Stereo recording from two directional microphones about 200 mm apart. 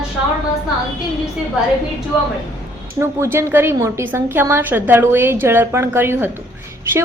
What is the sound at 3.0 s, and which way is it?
A woman's voice, 15° right (ahead or behind).